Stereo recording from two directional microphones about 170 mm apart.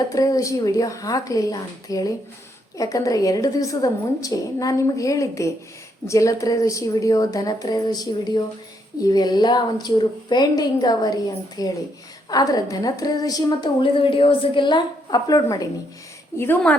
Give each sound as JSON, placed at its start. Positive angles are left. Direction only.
{"t": 0.1, "sound": "a woman's voice", "side_deg": 20}